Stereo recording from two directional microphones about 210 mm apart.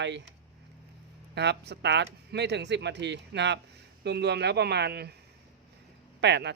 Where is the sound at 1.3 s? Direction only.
55° right (ahead or behind).